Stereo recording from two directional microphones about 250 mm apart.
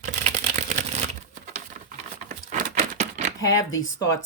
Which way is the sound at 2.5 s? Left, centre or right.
Right.